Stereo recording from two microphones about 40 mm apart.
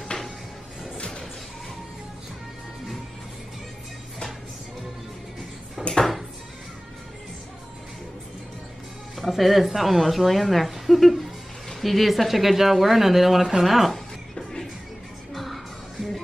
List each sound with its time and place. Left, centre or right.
0.9 s music: left
5.8 s a sound: centre
9.1 s a woman's voice: centre
14.3 s music: centre
15.3 s music: centre